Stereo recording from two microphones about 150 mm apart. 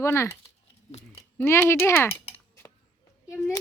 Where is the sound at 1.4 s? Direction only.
15° left (ahead or behind).